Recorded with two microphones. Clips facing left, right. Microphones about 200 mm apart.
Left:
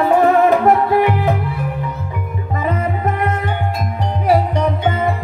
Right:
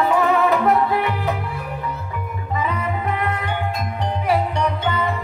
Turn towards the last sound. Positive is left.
turn(degrees=45)  # may be behind; listen again after turning